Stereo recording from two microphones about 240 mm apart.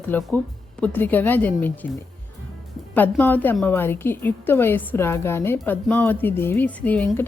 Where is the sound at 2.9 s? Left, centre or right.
Centre.